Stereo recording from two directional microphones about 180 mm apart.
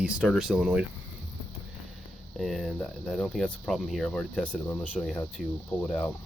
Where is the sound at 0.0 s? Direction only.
5° right (ahead or behind).